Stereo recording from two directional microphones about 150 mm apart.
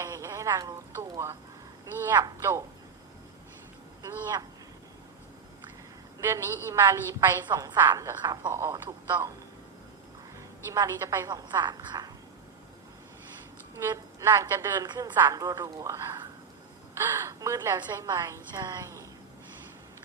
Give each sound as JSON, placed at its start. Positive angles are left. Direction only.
{"t": 0.0, "sound": "a sound", "side_deg": -20}
{"t": 2.1, "sound": "speech", "side_deg": -20}
{"t": 4.0, "sound": "speech", "side_deg": -25}
{"t": 6.1, "sound": "a woman's voice", "side_deg": -20}
{"t": 7.4, "sound": "speech", "side_deg": -25}
{"t": 10.7, "sound": "speech", "side_deg": -20}
{"t": 13.7, "sound": "a woman's voice", "side_deg": -20}
{"t": 14.8, "sound": "speech", "side_deg": -30}